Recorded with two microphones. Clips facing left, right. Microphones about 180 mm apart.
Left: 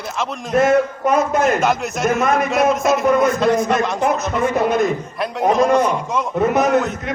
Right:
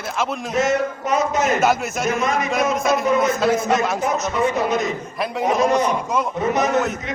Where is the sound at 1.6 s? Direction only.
5° right (ahead or behind).